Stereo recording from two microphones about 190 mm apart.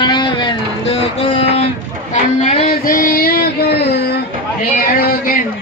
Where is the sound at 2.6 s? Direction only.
45° left (ahead or behind).